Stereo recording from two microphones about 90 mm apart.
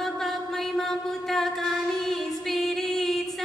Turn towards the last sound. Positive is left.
turn(degrees=5)  # may be behind; listen again after turning